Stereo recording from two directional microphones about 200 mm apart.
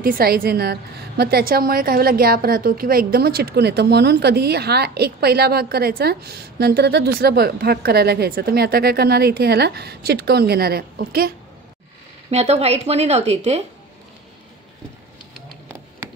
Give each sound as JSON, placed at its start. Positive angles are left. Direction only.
{"t": 0.0, "sound": "a woman's voice", "side_deg": -50}
{"t": 12.3, "sound": "speech", "side_deg": -35}